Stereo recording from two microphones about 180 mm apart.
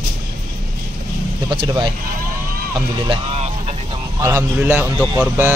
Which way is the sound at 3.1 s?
35° right (ahead or behind).